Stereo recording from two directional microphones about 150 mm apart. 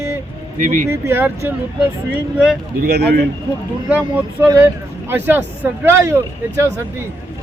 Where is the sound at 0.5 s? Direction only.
60° right (ahead or behind).